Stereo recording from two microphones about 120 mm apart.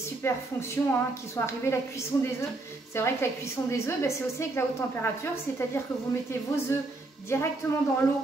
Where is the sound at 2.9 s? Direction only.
20° left (ahead or behind).